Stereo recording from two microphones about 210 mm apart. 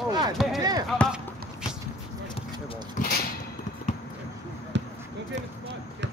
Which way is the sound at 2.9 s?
45° left (ahead or behind).